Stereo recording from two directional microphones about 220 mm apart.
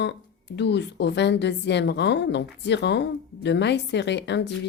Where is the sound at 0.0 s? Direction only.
50° left (ahead or behind).